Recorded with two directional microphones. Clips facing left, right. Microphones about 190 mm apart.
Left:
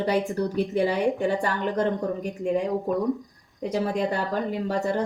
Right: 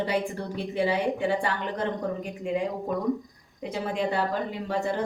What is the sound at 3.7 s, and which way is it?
Speech, 45° left (ahead or behind).